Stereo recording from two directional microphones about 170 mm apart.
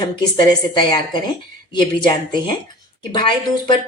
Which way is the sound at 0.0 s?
25° left (ahead or behind).